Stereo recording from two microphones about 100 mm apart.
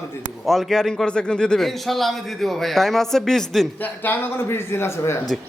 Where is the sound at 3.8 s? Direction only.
20° left (ahead or behind).